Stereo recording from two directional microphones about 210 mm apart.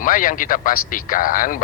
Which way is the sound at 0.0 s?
40° left (ahead or behind).